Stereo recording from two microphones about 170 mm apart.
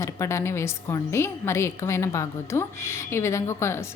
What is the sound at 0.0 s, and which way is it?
A woman's voice, 15° left (ahead or behind).